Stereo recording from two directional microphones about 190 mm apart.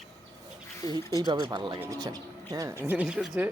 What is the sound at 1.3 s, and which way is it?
Speech, 20° right (ahead or behind).